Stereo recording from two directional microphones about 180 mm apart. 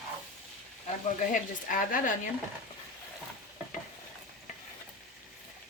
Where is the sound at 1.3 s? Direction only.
45° left (ahead or behind).